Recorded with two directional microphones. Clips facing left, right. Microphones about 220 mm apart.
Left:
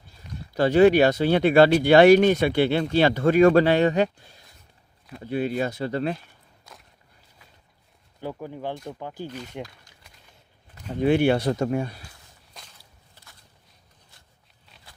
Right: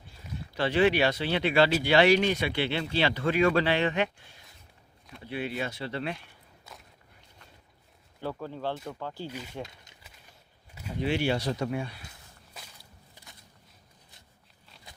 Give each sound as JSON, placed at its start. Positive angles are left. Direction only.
{"t": 0.5, "sound": "speech", "side_deg": 45}
{"t": 6.7, "sound": "walk", "side_deg": -5}
{"t": 8.2, "sound": "speech", "side_deg": 15}
{"t": 9.2, "sound": "speech", "side_deg": -10}
{"t": 10.0, "sound": "a sound", "side_deg": -5}
{"t": 11.0, "sound": "speech", "side_deg": 55}
{"t": 12.6, "sound": "walk", "side_deg": -5}
{"t": 13.2, "sound": "a sound", "side_deg": -15}